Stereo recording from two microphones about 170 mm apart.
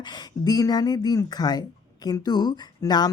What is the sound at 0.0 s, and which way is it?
Speech, 25° left (ahead or behind).